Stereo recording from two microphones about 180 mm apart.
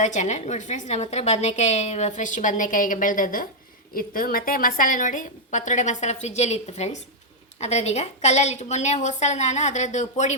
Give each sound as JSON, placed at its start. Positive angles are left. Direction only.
{"t": 0.0, "sound": "a woman's voice", "side_deg": 40}